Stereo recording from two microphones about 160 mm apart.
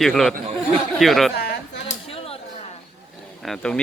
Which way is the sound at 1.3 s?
75° left (ahead or behind).